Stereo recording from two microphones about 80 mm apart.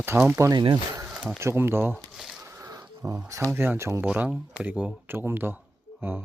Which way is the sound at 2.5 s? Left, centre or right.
Right.